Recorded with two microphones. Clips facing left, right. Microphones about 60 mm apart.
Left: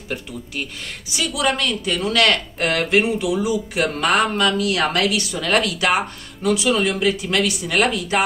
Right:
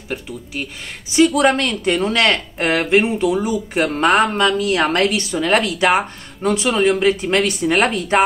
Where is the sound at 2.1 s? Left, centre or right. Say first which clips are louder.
Right 1 dB; right.